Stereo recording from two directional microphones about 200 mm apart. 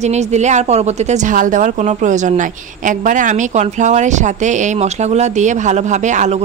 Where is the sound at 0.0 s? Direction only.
35° right (ahead or behind).